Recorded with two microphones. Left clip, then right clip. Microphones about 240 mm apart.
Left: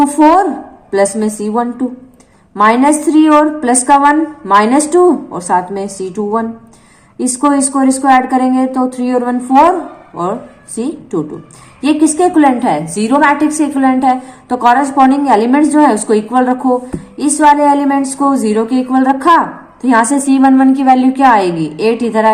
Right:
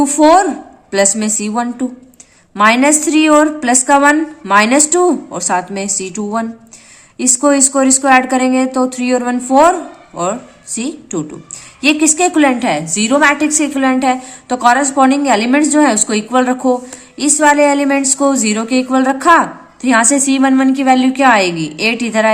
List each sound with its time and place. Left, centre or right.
0.0 s a woman's voice: right
10.8 s a woman's voice: right